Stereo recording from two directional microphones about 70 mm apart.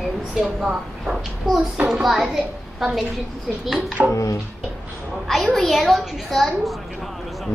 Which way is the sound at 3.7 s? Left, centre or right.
Centre.